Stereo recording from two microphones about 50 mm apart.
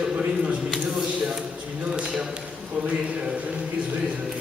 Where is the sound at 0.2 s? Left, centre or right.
Right.